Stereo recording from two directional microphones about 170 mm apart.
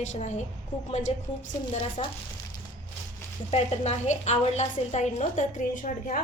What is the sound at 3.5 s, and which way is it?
A woman's voice, 35° left (ahead or behind).